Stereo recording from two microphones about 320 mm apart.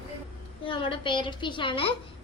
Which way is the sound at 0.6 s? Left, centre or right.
Centre.